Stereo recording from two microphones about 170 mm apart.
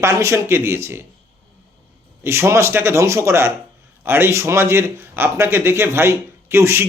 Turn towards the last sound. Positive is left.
turn(degrees=-15)  # may be behind; listen again after turning